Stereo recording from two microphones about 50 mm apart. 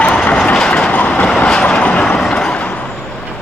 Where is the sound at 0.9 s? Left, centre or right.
Left.